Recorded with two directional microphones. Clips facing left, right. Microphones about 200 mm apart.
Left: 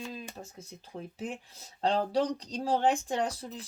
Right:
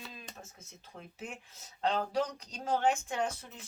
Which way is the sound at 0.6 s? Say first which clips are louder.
Left 8 dB; 35° left (ahead or behind).